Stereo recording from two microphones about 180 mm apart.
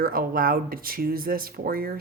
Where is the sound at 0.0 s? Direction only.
55° right (ahead or behind).